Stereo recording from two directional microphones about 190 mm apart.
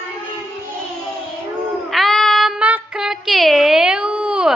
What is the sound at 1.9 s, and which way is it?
Child singing, centre (ahead or behind).